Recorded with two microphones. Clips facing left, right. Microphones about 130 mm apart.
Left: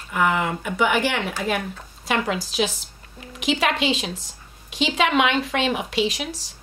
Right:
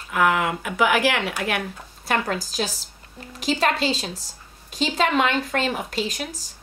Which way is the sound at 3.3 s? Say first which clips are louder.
Left 1 dB; 40° right (ahead or behind).